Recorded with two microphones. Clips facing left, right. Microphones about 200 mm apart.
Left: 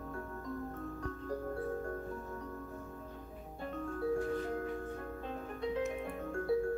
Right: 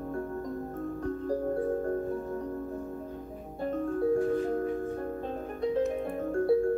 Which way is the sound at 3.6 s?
40° right (ahead or behind).